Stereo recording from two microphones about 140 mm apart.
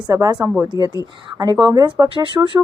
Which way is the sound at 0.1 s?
20° right (ahead or behind).